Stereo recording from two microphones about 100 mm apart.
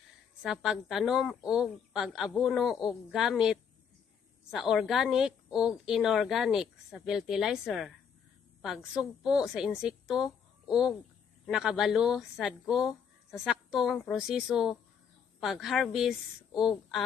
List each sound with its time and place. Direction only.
0.4 s a woman's voice: 5° right (ahead or behind)